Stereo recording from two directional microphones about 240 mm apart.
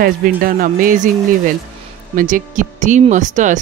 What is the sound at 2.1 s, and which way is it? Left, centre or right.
Speech, right.